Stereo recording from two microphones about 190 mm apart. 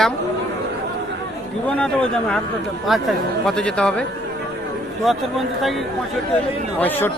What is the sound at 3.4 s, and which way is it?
Speech, 5° left (ahead or behind).